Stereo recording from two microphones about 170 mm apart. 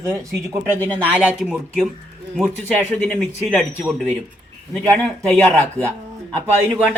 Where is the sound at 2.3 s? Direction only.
5° left (ahead or behind).